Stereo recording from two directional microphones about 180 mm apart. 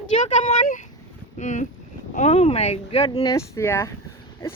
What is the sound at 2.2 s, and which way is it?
A woman's voice, 35° left (ahead or behind).